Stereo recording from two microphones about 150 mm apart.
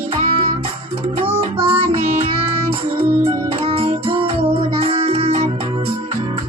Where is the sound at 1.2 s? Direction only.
40° right (ahead or behind).